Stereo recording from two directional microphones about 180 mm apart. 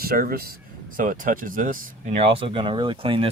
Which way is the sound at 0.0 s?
55° right (ahead or behind).